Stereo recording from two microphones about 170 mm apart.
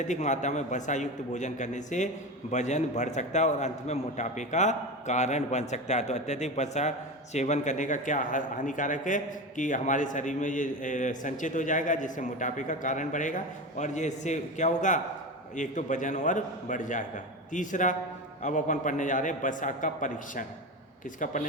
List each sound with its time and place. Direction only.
0.0 s a man's voice: 45° left (ahead or behind)